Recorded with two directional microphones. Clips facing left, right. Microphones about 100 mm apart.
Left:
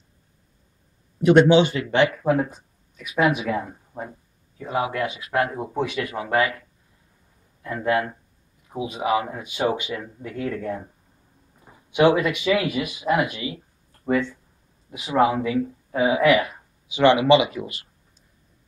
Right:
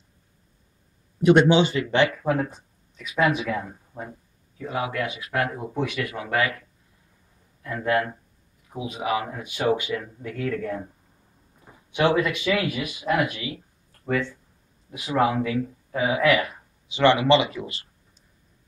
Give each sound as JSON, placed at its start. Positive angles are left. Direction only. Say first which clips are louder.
{"t": 1.2, "sound": "speech", "louder": "left 2 dB", "side_deg": -5}
{"t": 7.6, "sound": "speech", "louder": "left 1 dB", "side_deg": 15}
{"t": 12.1, "sound": "speech", "louder": "left 3 dB", "side_deg": 15}
{"t": 14.9, "sound": "speech", "louder": "left 3 dB", "side_deg": 10}